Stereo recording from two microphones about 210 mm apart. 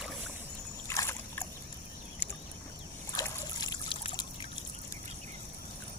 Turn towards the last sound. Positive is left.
turn(degrees=20)  # may be behind; listen again after turning